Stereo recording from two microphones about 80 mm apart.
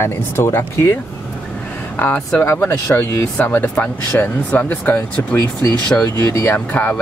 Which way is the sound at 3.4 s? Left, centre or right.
Left.